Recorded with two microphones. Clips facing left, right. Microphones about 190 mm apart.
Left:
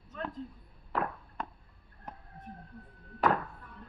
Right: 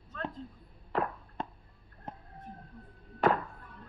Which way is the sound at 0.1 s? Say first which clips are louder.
Even; 15° left (ahead or behind).